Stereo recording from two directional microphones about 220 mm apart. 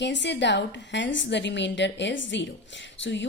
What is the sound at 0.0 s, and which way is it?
A woman's voice, 50° left (ahead or behind).